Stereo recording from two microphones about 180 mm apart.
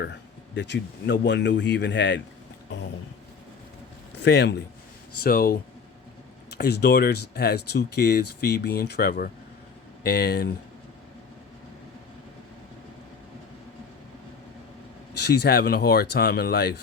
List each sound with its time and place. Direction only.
0.0 s speech: 75° left (ahead or behind)
4.2 s speech: 70° left (ahead or behind)
5.2 s speech: 55° left (ahead or behind)
15.2 s speech: 65° left (ahead or behind)